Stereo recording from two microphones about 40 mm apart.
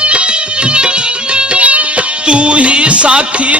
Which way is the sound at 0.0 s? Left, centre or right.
Right.